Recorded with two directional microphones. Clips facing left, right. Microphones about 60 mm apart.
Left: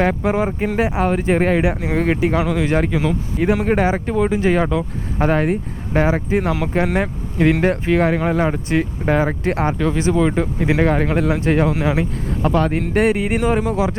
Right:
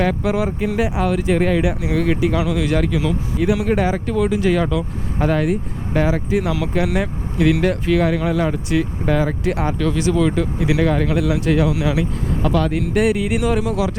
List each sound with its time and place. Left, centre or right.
0.0 s speech: left